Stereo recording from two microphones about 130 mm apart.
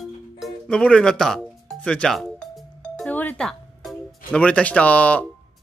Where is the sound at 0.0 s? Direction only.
5° left (ahead or behind).